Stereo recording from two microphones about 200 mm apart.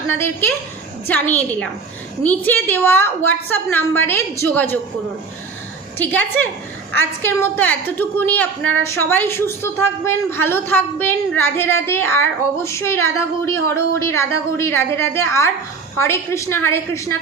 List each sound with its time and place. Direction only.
0.1 s a woman's voice: 10° left (ahead or behind)
6.0 s a woman's voice: 10° left (ahead or behind)